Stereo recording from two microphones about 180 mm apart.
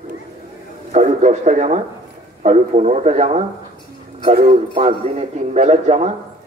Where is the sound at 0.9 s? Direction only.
40° right (ahead or behind).